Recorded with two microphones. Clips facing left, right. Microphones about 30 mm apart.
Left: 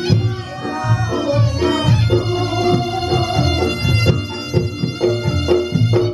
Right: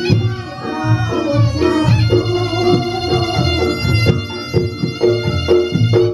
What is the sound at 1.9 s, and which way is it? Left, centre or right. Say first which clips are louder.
Music: right 2 dB; right.